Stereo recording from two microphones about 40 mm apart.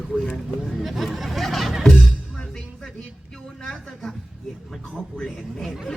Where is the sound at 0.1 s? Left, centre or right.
Centre.